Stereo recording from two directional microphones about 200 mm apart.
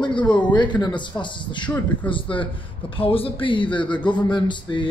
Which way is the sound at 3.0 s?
25° left (ahead or behind).